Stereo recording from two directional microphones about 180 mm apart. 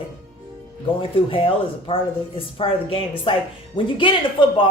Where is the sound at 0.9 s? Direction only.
30° left (ahead or behind).